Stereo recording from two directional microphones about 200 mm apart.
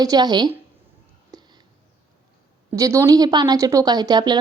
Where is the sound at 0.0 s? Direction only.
20° right (ahead or behind).